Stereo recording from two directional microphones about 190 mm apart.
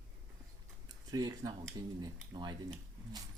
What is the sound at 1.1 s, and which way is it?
Speech, 20° right (ahead or behind).